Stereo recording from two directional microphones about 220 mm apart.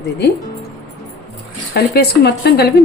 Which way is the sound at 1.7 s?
45° left (ahead or behind).